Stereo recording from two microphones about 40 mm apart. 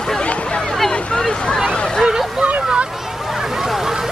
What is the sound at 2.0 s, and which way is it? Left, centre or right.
Vehicle, right.